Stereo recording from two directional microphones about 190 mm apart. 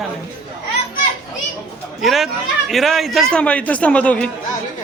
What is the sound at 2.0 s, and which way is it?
A man's voice, centre (ahead or behind).